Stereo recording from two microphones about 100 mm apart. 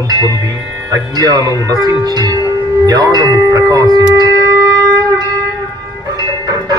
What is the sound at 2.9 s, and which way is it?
Speech, 40° right (ahead or behind).